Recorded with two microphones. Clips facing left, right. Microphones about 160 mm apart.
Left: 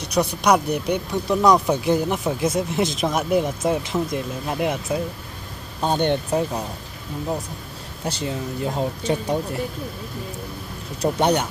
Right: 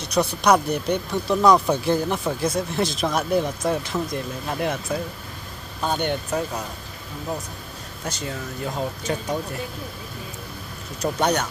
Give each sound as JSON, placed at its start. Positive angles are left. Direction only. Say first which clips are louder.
{"t": 0.0, "sound": "speech", "louder": "even", "side_deg": 15}
{"t": 5.8, "sound": "speech", "louder": "left 4 dB", "side_deg": 25}
{"t": 8.0, "sound": "speech", "louder": "left 4 dB", "side_deg": 30}
{"t": 11.1, "sound": "speech", "louder": "left 3 dB", "side_deg": 25}